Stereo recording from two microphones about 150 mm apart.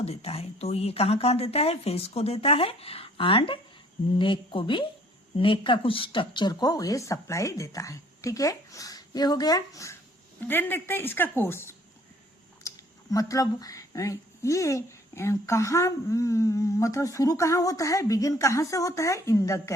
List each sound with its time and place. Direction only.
0.0 s a woman's voice: 40° left (ahead or behind); by 19.7 s 20° left (ahead or behind)